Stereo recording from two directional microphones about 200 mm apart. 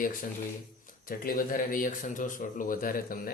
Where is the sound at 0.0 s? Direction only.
45° left (ahead or behind).